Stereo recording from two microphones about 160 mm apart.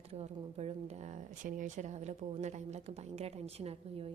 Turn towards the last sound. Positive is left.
turn(degrees=-40)  # may be behind; listen again after turning